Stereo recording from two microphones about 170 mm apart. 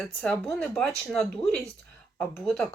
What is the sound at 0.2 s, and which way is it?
Speech, 5° left (ahead or behind).